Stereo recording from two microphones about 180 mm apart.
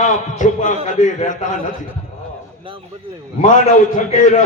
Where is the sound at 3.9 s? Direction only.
40° left (ahead or behind).